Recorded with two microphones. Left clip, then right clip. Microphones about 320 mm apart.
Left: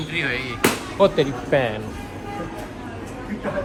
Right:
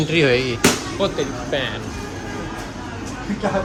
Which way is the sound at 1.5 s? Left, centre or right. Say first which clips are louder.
Left 4 dB; left.